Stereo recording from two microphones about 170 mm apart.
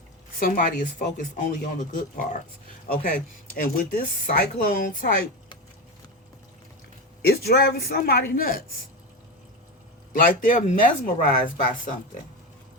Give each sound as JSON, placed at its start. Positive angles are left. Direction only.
{"t": 0.3, "sound": "speech", "side_deg": 55}
{"t": 2.9, "sound": "speech", "side_deg": 65}
{"t": 7.2, "sound": "speech", "side_deg": 65}
{"t": 10.1, "sound": "speech", "side_deg": 55}